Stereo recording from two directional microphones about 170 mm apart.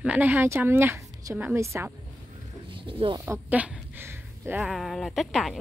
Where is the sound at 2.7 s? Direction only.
30° right (ahead or behind).